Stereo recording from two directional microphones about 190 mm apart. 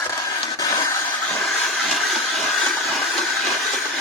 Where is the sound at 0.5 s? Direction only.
20° left (ahead or behind).